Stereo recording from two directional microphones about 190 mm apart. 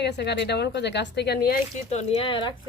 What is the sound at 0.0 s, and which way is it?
Speech, 60° left (ahead or behind).